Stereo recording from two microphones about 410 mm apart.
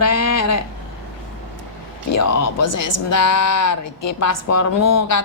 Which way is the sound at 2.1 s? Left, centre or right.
Left.